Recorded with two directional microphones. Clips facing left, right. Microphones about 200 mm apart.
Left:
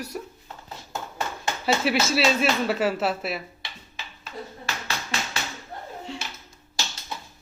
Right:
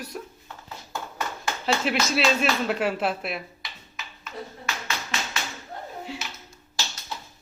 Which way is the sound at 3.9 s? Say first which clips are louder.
Even; 30° left (ahead or behind).